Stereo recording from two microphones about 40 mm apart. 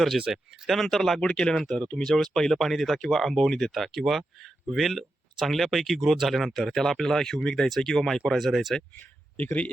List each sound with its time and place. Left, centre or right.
0.3 s speech: centre
1.2 s speech: centre
1.5 s speech: centre
1.8 s speech: left
2.0 s speech: centre
9.0 s speech: left